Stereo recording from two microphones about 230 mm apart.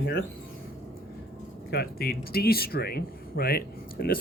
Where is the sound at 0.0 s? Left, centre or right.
Left.